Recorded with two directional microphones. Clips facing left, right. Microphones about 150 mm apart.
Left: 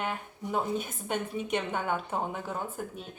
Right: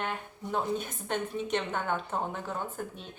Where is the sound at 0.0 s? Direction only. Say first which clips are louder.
Left 1 dB; 10° left (ahead or behind).